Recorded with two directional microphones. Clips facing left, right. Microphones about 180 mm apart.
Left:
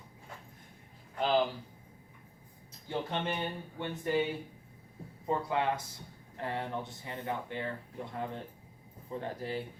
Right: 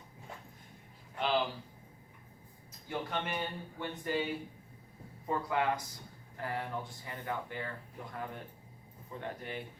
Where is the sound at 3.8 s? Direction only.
25° left (ahead or behind).